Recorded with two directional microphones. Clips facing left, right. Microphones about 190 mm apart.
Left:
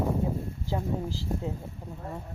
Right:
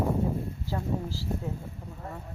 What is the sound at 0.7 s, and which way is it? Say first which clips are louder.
Speech: left 2 dB; 20° left (ahead or behind).